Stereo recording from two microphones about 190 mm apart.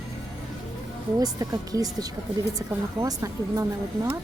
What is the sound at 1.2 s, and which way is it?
A woman's voice, 20° right (ahead or behind).